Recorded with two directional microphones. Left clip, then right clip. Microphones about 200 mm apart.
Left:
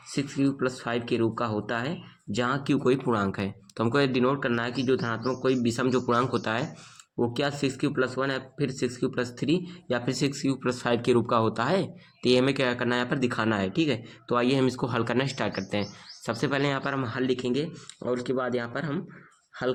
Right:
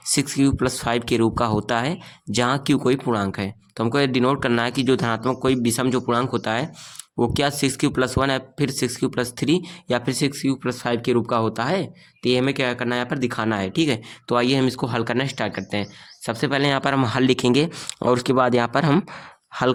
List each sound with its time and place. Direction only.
0.1 s speech: 45° right (ahead or behind); by 6.7 s 30° right (ahead or behind)
7.2 s speech: 40° right (ahead or behind); by 19.0 s 60° right (ahead or behind)